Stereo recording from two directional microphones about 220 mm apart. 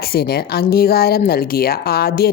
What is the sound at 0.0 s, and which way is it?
Speech, 45° left (ahead or behind).